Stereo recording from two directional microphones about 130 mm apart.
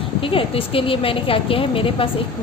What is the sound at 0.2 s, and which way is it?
A woman's voice, 45° left (ahead or behind).